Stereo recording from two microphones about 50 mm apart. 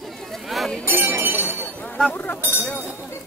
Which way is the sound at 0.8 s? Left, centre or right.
Right.